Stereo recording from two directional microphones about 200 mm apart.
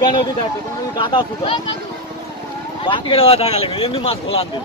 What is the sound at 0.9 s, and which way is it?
Speech, 25° left (ahead or behind).